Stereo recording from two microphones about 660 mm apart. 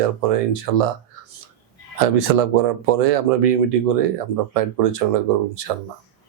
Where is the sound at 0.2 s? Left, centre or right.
Right.